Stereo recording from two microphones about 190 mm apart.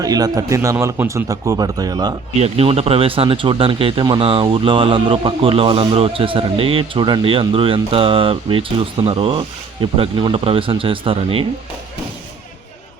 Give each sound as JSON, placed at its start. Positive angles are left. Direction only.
{"t": 0.0, "sound": "speech", "side_deg": -20}
{"t": 2.4, "sound": "speech", "side_deg": -30}